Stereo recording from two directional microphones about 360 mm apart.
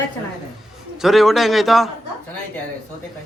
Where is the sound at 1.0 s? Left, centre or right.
Centre.